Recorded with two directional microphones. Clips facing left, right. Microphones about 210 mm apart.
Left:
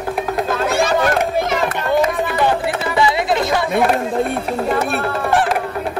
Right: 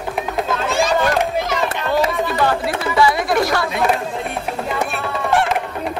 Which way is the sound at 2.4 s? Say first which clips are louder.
Left 2 dB; 20° left (ahead or behind).